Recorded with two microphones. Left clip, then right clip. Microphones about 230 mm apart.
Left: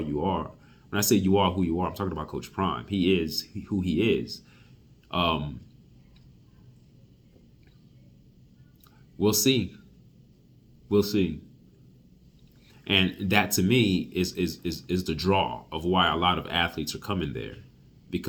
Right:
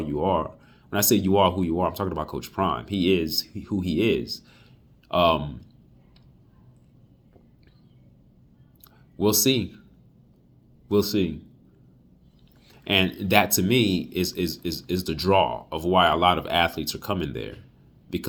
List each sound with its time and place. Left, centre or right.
0.0 s speech: centre
9.1 s speech: centre
10.8 s speech: centre
12.8 s speech: centre